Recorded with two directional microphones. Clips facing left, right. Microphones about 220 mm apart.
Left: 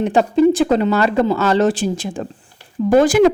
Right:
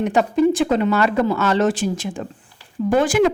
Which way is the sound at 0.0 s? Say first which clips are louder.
Left 3 dB; 30° left (ahead or behind).